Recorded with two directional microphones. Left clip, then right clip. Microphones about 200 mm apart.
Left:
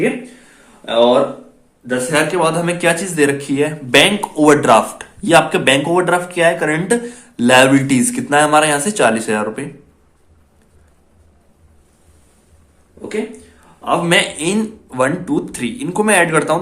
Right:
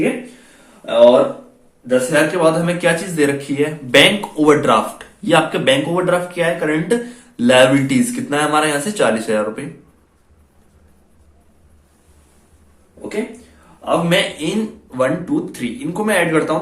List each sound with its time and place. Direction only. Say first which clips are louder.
1.9 s speech: right 1 dB; 45° left (ahead or behind)
13.8 s speech: left 2 dB; 50° left (ahead or behind)